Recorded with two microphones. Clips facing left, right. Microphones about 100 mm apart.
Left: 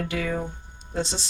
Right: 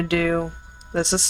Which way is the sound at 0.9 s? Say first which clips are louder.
Right 6 dB; 70° right (ahead or behind).